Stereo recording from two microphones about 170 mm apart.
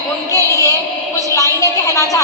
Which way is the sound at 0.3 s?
20° left (ahead or behind).